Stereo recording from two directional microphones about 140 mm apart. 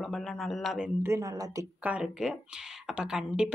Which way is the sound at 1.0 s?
25° right (ahead or behind).